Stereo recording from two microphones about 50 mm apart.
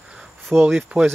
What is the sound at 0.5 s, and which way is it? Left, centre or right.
Speech, right.